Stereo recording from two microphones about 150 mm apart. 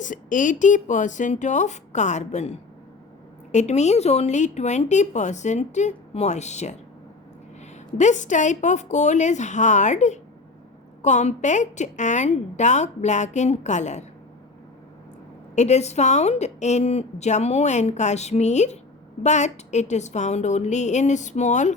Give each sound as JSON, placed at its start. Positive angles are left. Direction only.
{"t": 0.0, "sound": "a woman's voice", "side_deg": 60}
{"t": 7.9, "sound": "a woman's voice", "side_deg": 55}
{"t": 15.5, "sound": "a woman's voice", "side_deg": 50}